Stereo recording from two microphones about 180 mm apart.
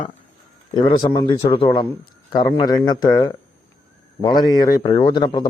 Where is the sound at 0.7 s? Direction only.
25° left (ahead or behind).